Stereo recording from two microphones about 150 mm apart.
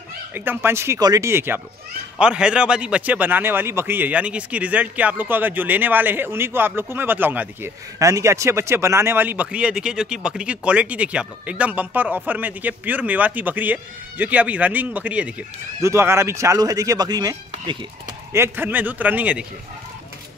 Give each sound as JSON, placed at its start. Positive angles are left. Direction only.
{"t": 0.3, "sound": "a man's voice", "side_deg": -15}
{"t": 18.3, "sound": "a man's voice", "side_deg": -15}